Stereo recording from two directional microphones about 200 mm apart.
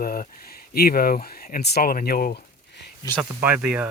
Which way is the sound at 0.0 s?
45° left (ahead or behind).